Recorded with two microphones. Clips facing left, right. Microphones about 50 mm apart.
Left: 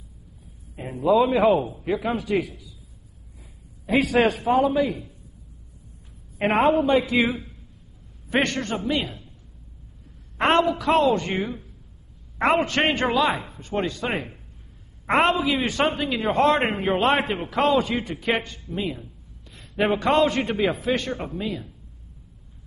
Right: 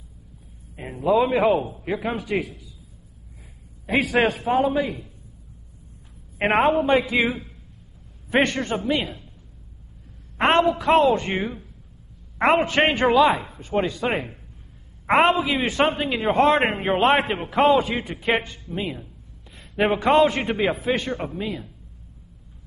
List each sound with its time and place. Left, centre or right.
1.0 s a man's voice: centre
3.8 s a woman's voice: right
6.3 s a woman's voice: right; by 8.9 s centre
10.3 s a woman's voice: centre